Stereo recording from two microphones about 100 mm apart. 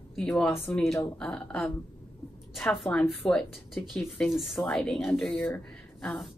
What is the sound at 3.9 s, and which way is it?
Speech, centre (ahead or behind).